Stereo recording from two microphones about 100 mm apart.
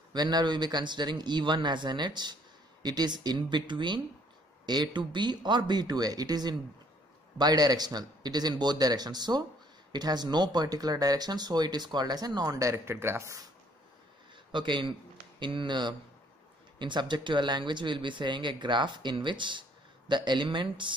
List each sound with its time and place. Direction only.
0.1 s speech: 45° right (ahead or behind); by 13.4 s 25° right (ahead or behind)
14.5 s speech: 50° right (ahead or behind)